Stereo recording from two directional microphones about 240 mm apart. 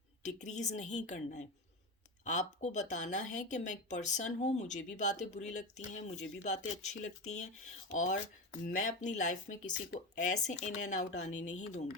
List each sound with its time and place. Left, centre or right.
0.2 s a woman's voice: left
8.6 s a woman's voice: left